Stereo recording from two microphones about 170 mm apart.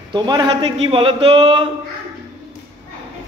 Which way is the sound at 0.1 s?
25° right (ahead or behind).